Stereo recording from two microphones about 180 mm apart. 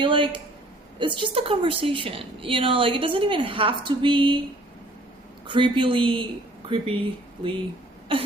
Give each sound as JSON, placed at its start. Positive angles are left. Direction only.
{"t": 0.0, "sound": "a woman's voice", "side_deg": -30}
{"t": 5.5, "sound": "a woman's voice", "side_deg": -30}